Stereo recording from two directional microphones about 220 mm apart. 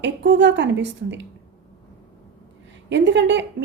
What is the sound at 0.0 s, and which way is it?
A woman's voice, 55° right (ahead or behind).